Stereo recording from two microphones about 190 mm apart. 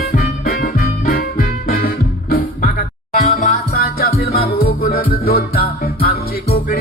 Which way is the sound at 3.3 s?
45° left (ahead or behind).